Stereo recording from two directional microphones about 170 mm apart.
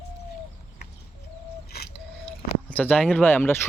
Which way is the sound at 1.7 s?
70° left (ahead or behind).